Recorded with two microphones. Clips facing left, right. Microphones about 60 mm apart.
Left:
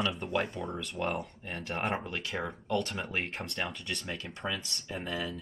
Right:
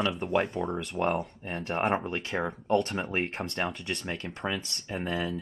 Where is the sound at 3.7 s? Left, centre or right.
Right.